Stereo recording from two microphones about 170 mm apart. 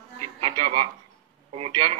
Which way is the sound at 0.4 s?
30° right (ahead or behind).